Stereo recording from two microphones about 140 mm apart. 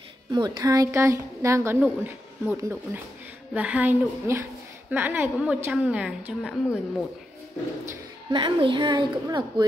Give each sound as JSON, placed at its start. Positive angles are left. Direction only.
{"t": 0.3, "sound": "a woman's voice", "side_deg": -30}
{"t": 8.3, "sound": "a woman's voice", "side_deg": -35}